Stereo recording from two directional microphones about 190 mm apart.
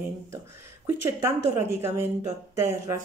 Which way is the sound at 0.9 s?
10° right (ahead or behind).